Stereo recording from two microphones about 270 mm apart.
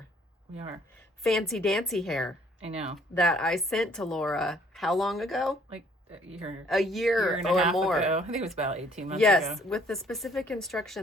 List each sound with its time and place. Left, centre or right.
1.2 s a woman's voice: centre
2.6 s speech: right
3.2 s a woman's voice: centre
6.7 s a woman's voice: centre
8.0 s speech: right
9.2 s a woman's voice: centre